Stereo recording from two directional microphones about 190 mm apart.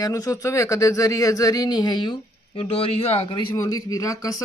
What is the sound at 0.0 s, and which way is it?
Speech, 15° left (ahead or behind).